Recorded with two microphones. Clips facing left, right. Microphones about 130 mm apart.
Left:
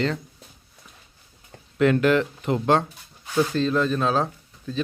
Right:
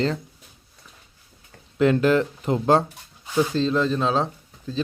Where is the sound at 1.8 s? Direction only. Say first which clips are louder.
Right 1 dB; 30° right (ahead or behind).